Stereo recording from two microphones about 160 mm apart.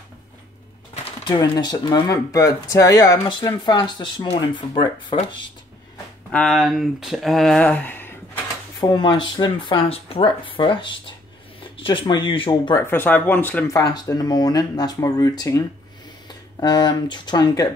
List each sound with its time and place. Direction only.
1.2 s speech: 30° left (ahead or behind)
6.3 s speech: 5° left (ahead or behind)
8.8 s speech: 30° left (ahead or behind)
12.8 s speech: 10° left (ahead or behind)